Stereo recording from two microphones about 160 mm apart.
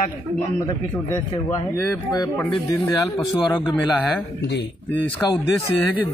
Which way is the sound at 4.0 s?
5° left (ahead or behind).